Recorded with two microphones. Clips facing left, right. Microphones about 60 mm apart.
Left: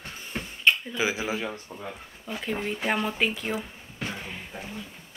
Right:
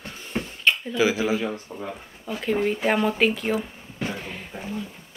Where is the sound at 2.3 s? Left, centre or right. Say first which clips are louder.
Right 7 dB; centre.